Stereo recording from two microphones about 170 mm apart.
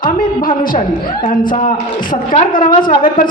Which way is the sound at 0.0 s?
55° left (ahead or behind).